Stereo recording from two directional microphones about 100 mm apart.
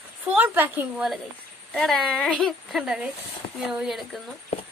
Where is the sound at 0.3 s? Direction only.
15° right (ahead or behind).